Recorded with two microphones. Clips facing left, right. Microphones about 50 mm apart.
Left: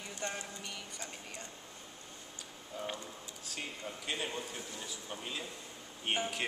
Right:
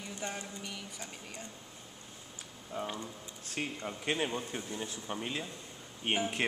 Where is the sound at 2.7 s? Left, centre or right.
Right.